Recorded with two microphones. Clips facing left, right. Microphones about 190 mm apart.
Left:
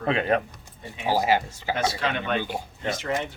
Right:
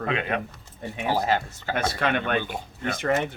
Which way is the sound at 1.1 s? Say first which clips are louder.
Left 2 dB; 10° left (ahead or behind).